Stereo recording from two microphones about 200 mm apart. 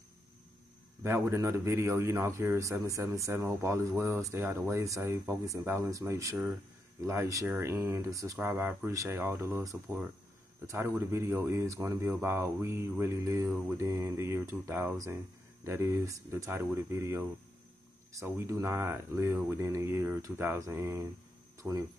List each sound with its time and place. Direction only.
1.0 s speech: 15° right (ahead or behind)